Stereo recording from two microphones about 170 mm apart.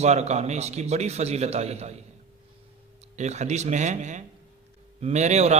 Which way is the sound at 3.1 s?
40° right (ahead or behind).